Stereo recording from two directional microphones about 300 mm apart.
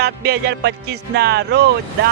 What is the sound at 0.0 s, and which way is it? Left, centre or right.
Speech, right.